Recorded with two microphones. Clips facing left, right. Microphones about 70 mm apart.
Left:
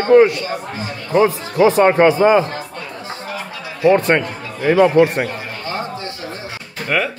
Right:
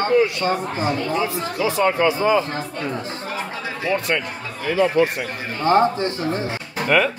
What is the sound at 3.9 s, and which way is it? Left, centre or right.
Speech, left.